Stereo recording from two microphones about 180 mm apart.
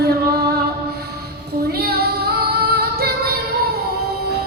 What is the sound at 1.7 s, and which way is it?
Female singing, 60° right (ahead or behind).